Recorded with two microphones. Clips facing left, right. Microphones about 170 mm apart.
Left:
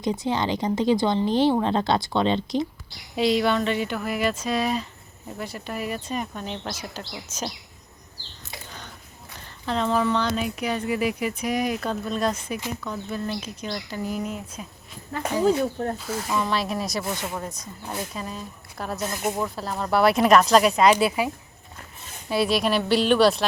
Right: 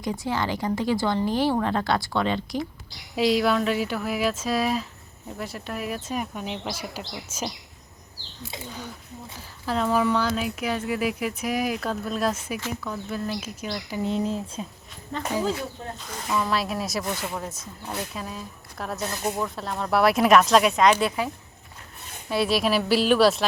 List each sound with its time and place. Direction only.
0.0 s speech: 20° left (ahead or behind)
3.2 s speech: centre (ahead or behind)
8.4 s a sound: 10° right (ahead or behind)
9.4 s speech: 5° right (ahead or behind)
14.0 s speech: 30° right (ahead or behind)
16.0 s speech: 5° left (ahead or behind)
19.1 s speech: 15° left (ahead or behind)
19.5 s speech: centre (ahead or behind)
22.3 s speech: centre (ahead or behind)